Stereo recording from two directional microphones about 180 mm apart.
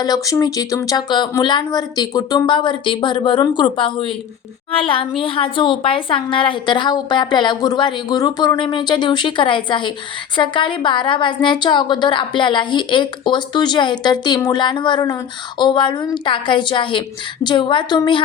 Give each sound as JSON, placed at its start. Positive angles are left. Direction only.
{"t": 0.0, "sound": "a woman's voice", "side_deg": 20}